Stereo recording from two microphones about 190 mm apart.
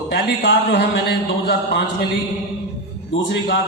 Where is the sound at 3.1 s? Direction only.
65° left (ahead or behind).